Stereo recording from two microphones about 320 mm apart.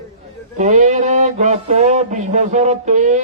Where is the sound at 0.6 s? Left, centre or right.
Right.